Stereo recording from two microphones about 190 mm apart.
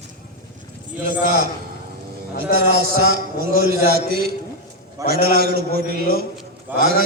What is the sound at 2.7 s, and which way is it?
A man's voice, 50° right (ahead or behind).